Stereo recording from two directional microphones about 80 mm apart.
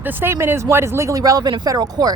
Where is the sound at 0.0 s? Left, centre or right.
Right.